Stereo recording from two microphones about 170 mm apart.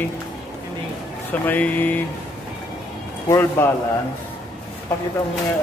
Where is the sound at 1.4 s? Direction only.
10° left (ahead or behind).